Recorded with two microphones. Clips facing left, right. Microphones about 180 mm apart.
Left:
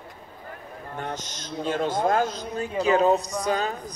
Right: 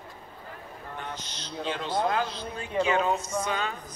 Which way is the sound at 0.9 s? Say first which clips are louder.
Left 6 dB; 45° left (ahead or behind).